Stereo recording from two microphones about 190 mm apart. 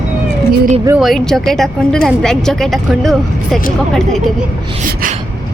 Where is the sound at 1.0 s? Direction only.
Centre (ahead or behind).